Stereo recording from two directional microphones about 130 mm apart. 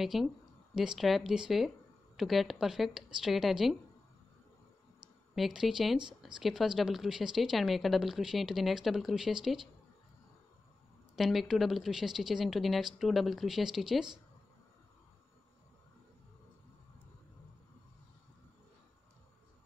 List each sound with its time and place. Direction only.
0.0 s speech: centre (ahead or behind)
5.3 s speech: 5° right (ahead or behind)
5.9 s speech: 35° right (ahead or behind)
6.4 s speech: 5° right (ahead or behind)
11.1 s speech: centre (ahead or behind)